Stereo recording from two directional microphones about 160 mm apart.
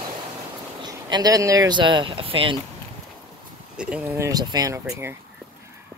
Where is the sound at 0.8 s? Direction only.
25° right (ahead or behind).